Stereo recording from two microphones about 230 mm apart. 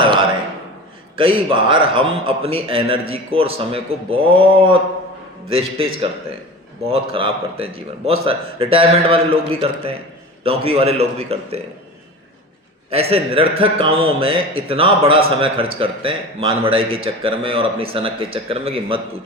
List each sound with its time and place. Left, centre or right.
0.0 s a sound: right
1.1 s a man's voice: right
12.9 s a man's voice: right